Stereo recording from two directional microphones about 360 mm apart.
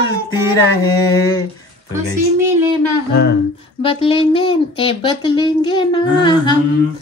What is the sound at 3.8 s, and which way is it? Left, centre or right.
Female singing, centre.